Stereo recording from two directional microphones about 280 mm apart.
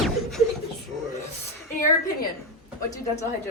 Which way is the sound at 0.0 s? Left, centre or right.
Centre.